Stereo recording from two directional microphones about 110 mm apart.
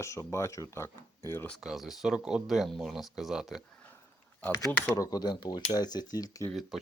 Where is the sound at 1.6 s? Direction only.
5° right (ahead or behind).